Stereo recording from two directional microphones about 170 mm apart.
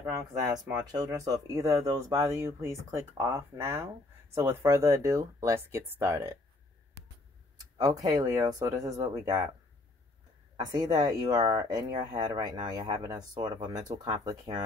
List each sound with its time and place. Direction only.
0.9 s speech: 20° right (ahead or behind)
7.7 s speech: 20° right (ahead or behind)
10.5 s speech: 25° right (ahead or behind)